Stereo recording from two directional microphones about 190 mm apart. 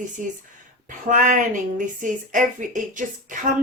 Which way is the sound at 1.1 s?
45° right (ahead or behind).